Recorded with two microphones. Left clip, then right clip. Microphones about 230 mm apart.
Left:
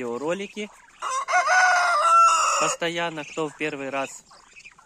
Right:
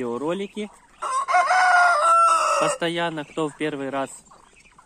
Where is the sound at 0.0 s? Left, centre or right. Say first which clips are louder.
Right 1 dB; centre.